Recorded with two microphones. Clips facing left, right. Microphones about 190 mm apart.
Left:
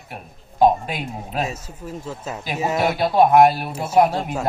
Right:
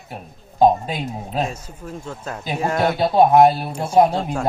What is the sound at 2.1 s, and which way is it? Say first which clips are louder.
Speech: right 2 dB; 5° left (ahead or behind).